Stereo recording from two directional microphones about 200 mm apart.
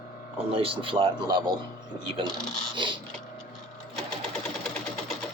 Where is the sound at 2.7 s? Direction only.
25° right (ahead or behind).